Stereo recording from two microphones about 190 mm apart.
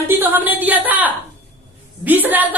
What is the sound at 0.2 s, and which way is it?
A woman's voice, 10° right (ahead or behind).